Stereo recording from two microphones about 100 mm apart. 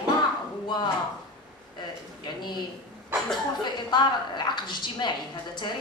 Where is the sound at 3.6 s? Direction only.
50° left (ahead or behind).